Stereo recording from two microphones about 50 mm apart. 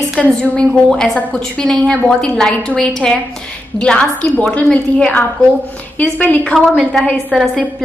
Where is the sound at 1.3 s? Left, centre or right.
Centre.